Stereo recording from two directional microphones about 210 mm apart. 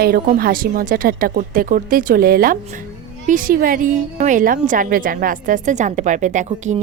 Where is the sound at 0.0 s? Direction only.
45° right (ahead or behind).